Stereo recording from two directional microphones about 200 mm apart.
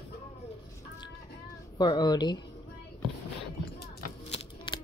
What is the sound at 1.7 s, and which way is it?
Speech, 20° left (ahead or behind).